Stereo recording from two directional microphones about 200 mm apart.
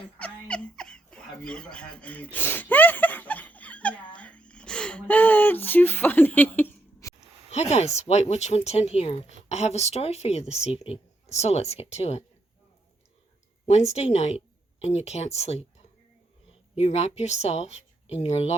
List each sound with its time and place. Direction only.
0.2 s a sound: 5° left (ahead or behind)
7.5 s speech: 35° left (ahead or behind)
13.7 s speech: 35° left (ahead or behind)
16.7 s speech: 30° left (ahead or behind)